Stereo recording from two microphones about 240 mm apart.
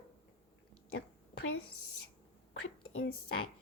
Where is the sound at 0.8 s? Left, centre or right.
Left.